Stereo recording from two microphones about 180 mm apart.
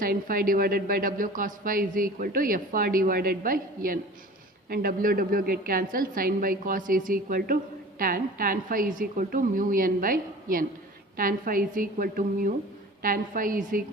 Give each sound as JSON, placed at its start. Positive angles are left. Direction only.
{"t": 0.0, "sound": "a woman's voice", "side_deg": -55}